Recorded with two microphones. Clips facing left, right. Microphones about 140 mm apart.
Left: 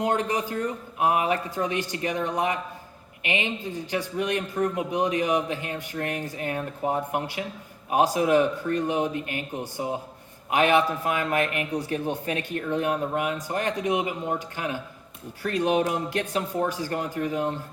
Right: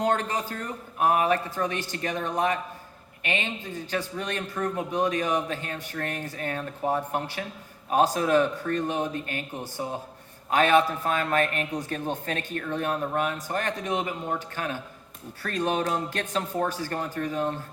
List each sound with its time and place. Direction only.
0.0 s a man's voice: 15° left (ahead or behind)